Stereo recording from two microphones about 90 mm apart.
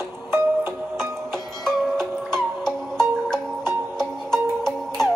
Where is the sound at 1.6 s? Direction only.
5° left (ahead or behind).